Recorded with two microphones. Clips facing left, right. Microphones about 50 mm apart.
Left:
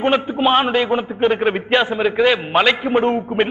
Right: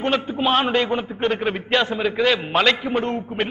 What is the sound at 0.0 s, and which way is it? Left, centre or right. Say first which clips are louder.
A man's voice: left 5 dB; centre.